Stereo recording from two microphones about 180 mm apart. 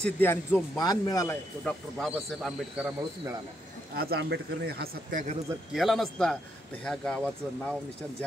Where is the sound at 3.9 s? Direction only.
60° right (ahead or behind).